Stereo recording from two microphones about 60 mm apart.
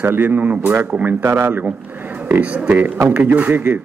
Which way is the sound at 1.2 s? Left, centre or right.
Right.